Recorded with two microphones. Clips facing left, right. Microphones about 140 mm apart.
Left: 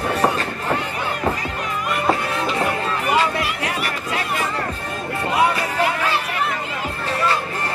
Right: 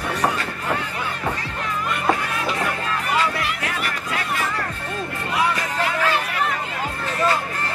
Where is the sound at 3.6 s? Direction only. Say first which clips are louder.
Left 2 dB; 25° left (ahead or behind).